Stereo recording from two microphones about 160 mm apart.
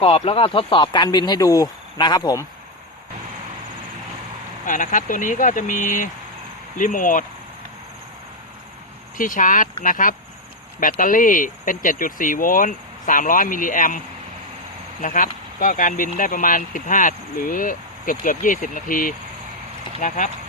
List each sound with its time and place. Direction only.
0.0 s speech: 35° left (ahead or behind)
4.6 s speech: 55° left (ahead or behind)
9.1 s speech: 55° left (ahead or behind)
15.0 s speech: 55° left (ahead or behind)